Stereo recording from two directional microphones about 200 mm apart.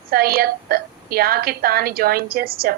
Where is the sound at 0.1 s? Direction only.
50° right (ahead or behind).